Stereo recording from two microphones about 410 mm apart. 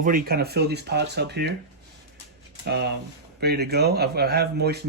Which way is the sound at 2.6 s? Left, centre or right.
Right.